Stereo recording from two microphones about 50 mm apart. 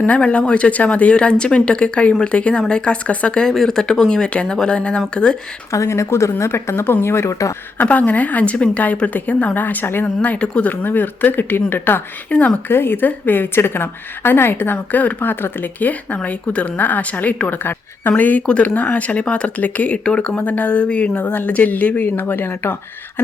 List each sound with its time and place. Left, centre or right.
0.2 s speech: left
3.5 s speech: centre
5.7 s speech: left
7.8 s speech: left
9.6 s a woman's voice: left
10.2 s speech: left
10.7 s a woman's voice: left
12.3 s speech: left
12.6 s a woman's voice: left
18.2 s a woman's voice: left
20.4 s speech: left
21.2 s a woman's voice: left